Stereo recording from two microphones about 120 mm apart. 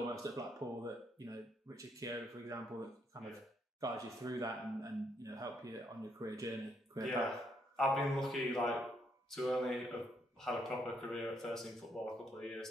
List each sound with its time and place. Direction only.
0.2 s speech: 30° right (ahead or behind)
7.1 s speech: centre (ahead or behind)